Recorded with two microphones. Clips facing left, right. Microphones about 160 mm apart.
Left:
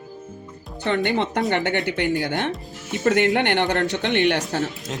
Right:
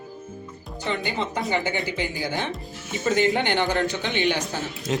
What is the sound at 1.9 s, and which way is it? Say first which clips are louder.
Speech: left 6 dB; 70° left (ahead or behind).